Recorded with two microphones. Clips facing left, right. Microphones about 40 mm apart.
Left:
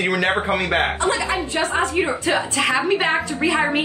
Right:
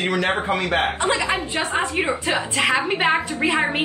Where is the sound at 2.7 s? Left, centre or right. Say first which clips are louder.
Even; right.